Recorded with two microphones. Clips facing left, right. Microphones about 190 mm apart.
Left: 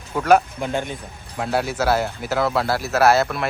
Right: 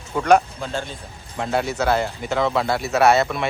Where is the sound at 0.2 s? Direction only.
5° left (ahead or behind).